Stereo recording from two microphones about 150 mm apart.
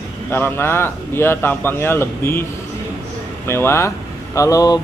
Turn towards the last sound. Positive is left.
turn(degrees=25)  # may be behind; listen again after turning